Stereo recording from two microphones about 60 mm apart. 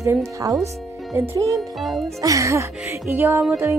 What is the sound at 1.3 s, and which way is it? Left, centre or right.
Music, right.